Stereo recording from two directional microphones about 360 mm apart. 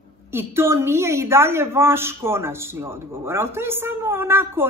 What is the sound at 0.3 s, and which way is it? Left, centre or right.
A woman's voice, centre.